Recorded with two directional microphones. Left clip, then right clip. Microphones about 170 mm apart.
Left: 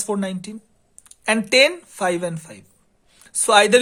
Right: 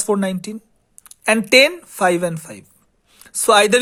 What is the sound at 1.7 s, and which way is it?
A man's voice, 30° right (ahead or behind).